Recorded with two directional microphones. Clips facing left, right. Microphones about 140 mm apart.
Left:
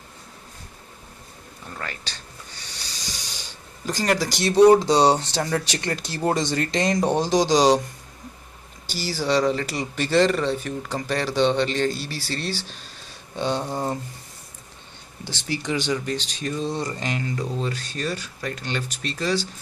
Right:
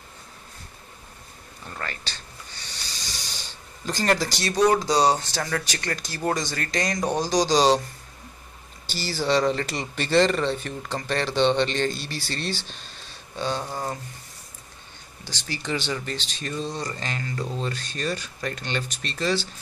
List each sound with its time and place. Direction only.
1.8 s speech: 5° left (ahead or behind)
3.8 s speech: 10° left (ahead or behind)
8.8 s speech: 10° left (ahead or behind)
13.4 s speech: 20° left (ahead or behind)
15.2 s speech: 20° left (ahead or behind)
16.6 s speech: 20° left (ahead or behind)